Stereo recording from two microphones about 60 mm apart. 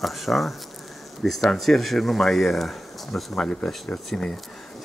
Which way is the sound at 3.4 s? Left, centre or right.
Centre.